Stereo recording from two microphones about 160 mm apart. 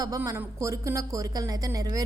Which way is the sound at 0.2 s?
15° right (ahead or behind).